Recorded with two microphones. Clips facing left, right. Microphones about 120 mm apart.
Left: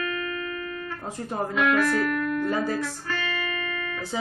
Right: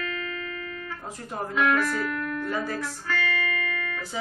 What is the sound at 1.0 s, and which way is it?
Speech, 25° left (ahead or behind).